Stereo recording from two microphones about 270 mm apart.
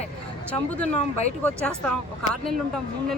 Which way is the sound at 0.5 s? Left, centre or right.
Centre.